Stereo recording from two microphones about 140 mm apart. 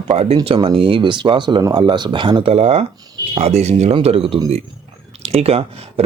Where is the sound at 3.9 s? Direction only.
40° right (ahead or behind).